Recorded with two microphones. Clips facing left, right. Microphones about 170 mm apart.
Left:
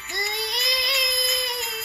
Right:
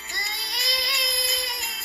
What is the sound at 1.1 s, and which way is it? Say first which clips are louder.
Baby cry: left 4 dB; 35° right (ahead or behind).